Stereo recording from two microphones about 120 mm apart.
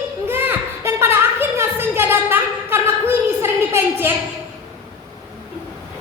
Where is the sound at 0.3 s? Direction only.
15° right (ahead or behind).